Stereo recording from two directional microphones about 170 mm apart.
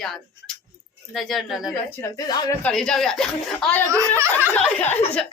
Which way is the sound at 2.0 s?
25° left (ahead or behind).